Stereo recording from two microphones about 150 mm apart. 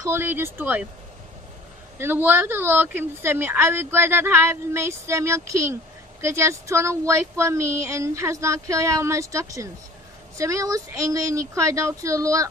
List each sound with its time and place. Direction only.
0.0 s speech: 15° right (ahead or behind)
2.0 s speech: 15° right (ahead or behind)